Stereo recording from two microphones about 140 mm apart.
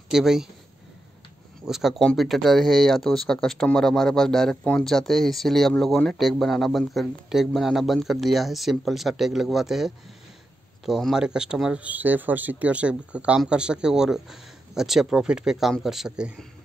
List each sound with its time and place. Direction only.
0.1 s speech: 5° right (ahead or behind)
1.7 s speech: centre (ahead or behind)